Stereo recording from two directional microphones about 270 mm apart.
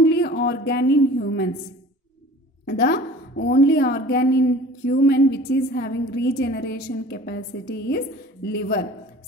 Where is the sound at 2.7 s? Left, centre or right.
Left.